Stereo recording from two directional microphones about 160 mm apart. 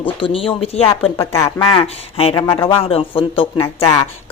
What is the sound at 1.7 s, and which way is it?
Speech, 35° left (ahead or behind).